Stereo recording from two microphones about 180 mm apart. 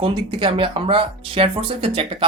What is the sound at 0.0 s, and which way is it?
Speech, 25° right (ahead or behind).